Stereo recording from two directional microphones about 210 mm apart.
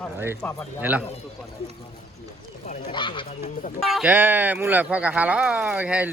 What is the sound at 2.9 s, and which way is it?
Speech, 25° left (ahead or behind).